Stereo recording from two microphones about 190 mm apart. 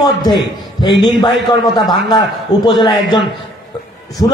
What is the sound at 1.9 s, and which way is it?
A man's voice, 20° left (ahead or behind).